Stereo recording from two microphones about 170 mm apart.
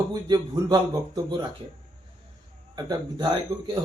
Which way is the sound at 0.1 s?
25° right (ahead or behind).